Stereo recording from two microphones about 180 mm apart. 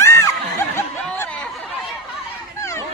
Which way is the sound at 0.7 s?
10° left (ahead or behind).